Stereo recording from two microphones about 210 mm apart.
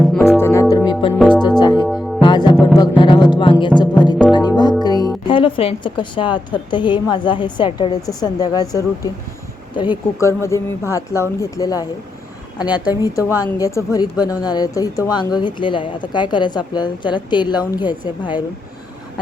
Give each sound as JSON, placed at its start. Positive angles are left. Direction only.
{"t": 0.0, "sound": "music", "side_deg": 0}
{"t": 1.9, "sound": "music", "side_deg": 0}
{"t": 2.2, "sound": "music", "side_deg": 20}
{"t": 3.0, "sound": "speech", "side_deg": 20}
{"t": 3.8, "sound": "music", "side_deg": 20}
{"t": 4.8, "sound": "a woman's voice", "side_deg": 20}